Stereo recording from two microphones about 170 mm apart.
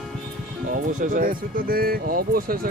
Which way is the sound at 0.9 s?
50° right (ahead or behind).